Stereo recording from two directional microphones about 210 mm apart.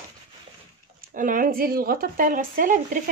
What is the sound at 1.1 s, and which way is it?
Speech, 40° right (ahead or behind).